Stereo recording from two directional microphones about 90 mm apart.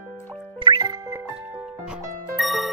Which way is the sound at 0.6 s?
55° right (ahead or behind).